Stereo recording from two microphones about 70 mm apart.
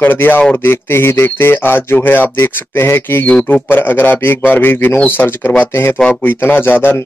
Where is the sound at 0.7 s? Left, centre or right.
Left.